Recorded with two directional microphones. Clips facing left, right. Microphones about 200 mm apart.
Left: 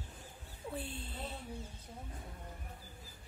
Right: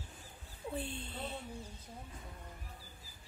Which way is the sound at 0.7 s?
5° left (ahead or behind).